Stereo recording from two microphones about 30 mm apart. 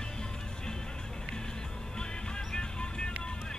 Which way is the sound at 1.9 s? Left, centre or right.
Left.